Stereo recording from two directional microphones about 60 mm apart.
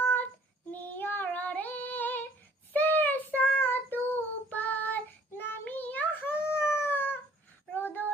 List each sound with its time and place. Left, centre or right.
0.0 s child singing: left
0.7 s female singing: left
2.7 s child singing: left
6.5 s howl: left
7.7 s a sound: left